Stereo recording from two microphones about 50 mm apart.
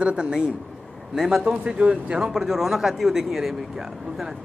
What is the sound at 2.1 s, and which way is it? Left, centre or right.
Speech, centre.